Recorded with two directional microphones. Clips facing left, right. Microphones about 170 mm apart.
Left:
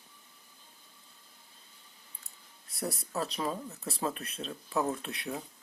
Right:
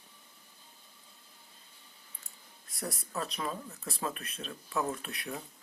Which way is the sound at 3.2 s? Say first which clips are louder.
Left 3 dB; 25° left (ahead or behind).